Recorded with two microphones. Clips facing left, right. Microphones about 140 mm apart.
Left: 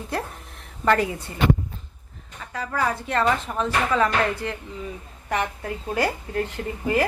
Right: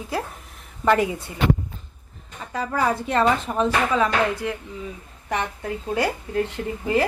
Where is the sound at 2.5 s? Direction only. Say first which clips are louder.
Right 3 dB; 25° right (ahead or behind).